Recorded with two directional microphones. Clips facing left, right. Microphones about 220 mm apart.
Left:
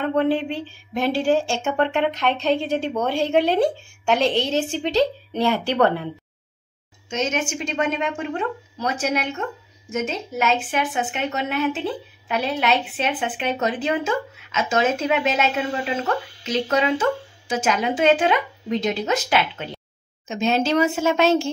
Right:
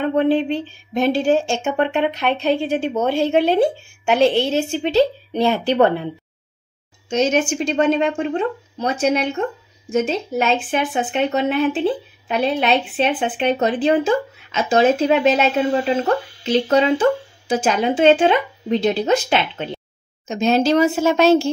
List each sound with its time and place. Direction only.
0.0 s a woman's voice: 20° right (ahead or behind)
4.4 s speech: 15° left (ahead or behind)
5.3 s a woman's voice: 15° right (ahead or behind)
7.1 s a woman's voice: 35° right (ahead or behind)
20.2 s speech: 40° right (ahead or behind)